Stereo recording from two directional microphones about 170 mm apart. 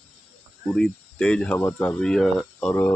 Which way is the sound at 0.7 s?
5° left (ahead or behind).